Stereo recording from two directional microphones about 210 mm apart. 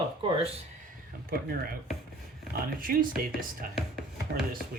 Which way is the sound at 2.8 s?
45° right (ahead or behind).